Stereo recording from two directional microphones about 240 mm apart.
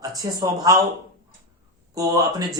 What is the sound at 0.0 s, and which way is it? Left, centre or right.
Speech, centre.